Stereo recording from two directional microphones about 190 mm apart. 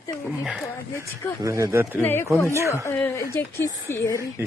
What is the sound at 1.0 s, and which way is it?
Speech, 15° right (ahead or behind).